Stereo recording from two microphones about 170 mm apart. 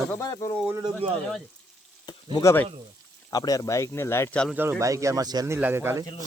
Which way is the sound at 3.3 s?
20° left (ahead or behind).